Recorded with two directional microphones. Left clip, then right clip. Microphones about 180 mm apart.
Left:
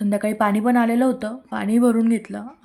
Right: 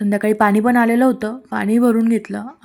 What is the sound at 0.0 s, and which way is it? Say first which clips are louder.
Speech: right 5 dB; 20° right (ahead or behind).